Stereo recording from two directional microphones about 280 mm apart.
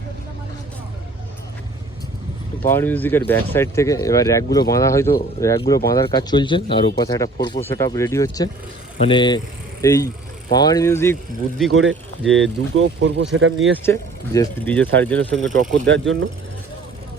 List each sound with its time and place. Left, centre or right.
2.6 s speech: centre
11.7 s speech: right
12.2 s speech: centre
12.7 s speech: right
13.8 s speech: centre
15.9 s speech: right